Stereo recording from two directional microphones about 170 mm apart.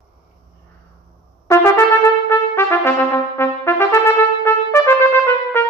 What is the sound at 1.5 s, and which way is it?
Trumpet, 15° left (ahead or behind).